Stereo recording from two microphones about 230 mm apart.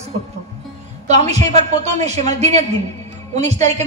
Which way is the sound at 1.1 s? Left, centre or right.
Right.